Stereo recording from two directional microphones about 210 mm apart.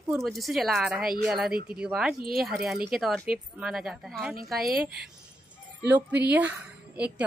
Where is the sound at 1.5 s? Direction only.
45° right (ahead or behind).